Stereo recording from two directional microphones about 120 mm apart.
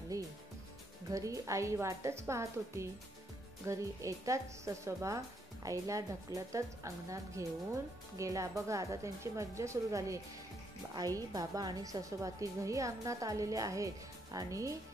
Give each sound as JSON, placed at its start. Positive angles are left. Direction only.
{"t": 0.1, "sound": "music", "side_deg": -30}
{"t": 1.1, "sound": "a woman's voice", "side_deg": -30}